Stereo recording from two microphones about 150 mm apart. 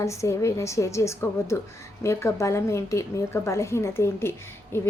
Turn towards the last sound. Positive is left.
turn(degrees=15)  # may be behind; listen again after turning